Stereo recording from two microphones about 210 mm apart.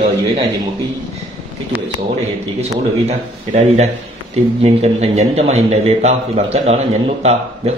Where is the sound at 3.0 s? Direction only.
30° right (ahead or behind).